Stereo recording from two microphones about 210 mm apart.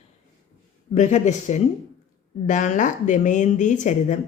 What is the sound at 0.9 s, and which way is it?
Speech, 35° left (ahead or behind).